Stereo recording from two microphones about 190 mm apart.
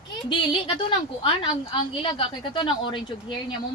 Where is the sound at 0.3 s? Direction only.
25° left (ahead or behind).